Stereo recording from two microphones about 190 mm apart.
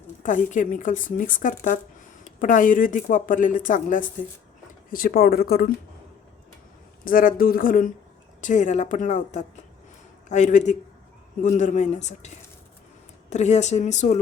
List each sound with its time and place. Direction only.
0.2 s speech: 40° left (ahead or behind)
7.0 s speech: 45° left (ahead or behind)
13.3 s speech: 40° left (ahead or behind)